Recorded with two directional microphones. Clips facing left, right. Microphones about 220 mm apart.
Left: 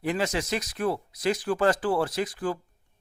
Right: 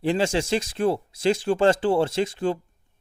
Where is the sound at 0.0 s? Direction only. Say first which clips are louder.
Right 5 dB; 30° right (ahead or behind).